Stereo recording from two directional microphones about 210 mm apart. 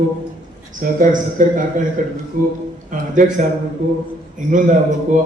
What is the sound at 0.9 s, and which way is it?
A man's voice, 40° right (ahead or behind).